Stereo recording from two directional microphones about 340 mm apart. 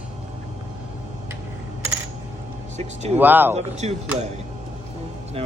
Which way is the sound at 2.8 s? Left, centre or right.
Centre.